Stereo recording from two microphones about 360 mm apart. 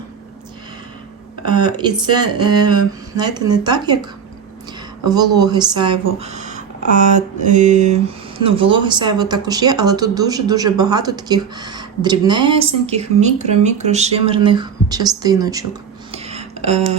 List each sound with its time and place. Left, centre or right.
1.6 s speech: centre
5.0 s speech: centre
16.1 s a sound: centre